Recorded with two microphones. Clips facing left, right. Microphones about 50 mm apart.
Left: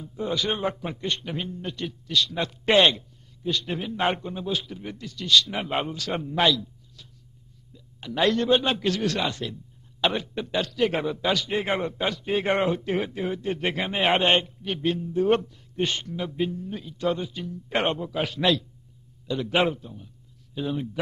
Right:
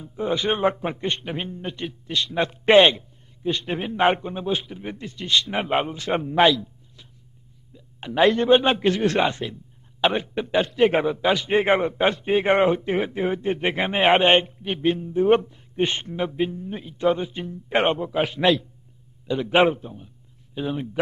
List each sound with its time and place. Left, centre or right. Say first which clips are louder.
0.0 s a man's voice: right 3 dB; right
11.4 s a man's voice: right 7 dB; right
12.4 s a man's voice: right 4 dB; right